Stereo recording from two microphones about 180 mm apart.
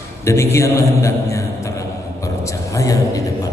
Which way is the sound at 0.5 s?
15° left (ahead or behind).